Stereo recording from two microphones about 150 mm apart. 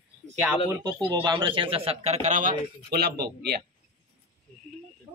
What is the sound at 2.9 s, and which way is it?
Speech, 90° right.